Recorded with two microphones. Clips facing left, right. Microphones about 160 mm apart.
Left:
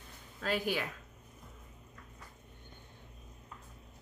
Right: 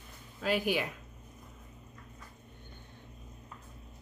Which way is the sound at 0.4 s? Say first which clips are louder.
Right 3 dB; 15° right (ahead or behind).